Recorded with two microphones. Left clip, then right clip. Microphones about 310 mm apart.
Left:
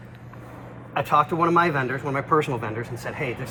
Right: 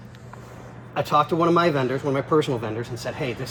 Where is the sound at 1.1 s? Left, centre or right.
Left.